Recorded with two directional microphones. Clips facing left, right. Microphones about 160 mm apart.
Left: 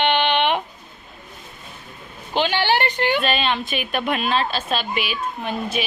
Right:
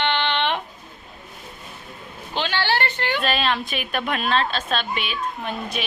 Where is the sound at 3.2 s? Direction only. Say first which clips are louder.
Left 1 dB; centre (ahead or behind).